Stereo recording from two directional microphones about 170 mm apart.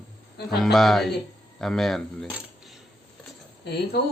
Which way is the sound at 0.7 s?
Centre (ahead or behind).